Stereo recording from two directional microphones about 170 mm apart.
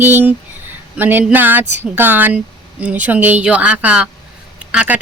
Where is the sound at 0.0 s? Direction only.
10° right (ahead or behind).